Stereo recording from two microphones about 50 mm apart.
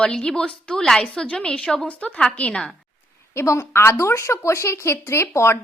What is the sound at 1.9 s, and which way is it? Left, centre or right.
Speech, left.